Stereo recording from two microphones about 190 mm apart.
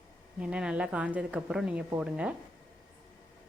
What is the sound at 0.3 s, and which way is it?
A woman's voice, 5° right (ahead or behind).